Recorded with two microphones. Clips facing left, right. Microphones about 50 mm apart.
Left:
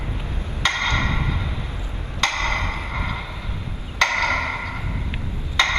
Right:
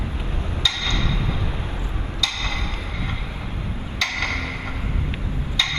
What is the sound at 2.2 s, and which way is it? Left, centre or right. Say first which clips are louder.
Wood block: left 5 dB; left.